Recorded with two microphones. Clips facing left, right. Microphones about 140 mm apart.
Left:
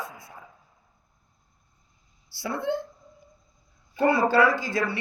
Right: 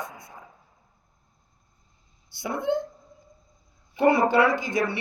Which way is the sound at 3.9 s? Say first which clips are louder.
Right 1 dB; 20° right (ahead or behind).